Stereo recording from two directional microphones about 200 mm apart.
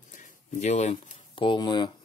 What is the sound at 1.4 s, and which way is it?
Speech, 25° left (ahead or behind).